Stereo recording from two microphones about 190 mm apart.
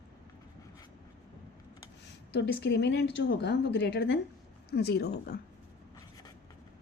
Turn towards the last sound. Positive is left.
turn(degrees=60)  # may be behind; listen again after turning